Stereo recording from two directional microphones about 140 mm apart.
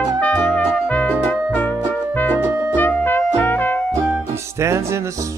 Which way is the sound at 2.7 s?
15° left (ahead or behind).